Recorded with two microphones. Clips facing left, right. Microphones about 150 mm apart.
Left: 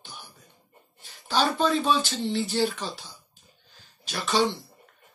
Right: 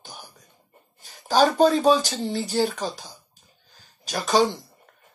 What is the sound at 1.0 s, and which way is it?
Speech, 40° right (ahead or behind).